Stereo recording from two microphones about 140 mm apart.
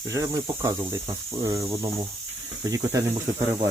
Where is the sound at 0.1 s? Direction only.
20° right (ahead or behind).